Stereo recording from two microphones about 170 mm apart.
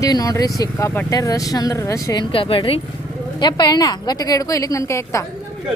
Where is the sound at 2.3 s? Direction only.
30° left (ahead or behind).